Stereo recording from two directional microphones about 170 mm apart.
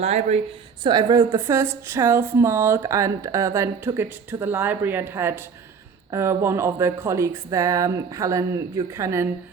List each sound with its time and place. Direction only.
0.0 s speech: 40° right (ahead or behind)
0.9 s speech: 25° right (ahead or behind)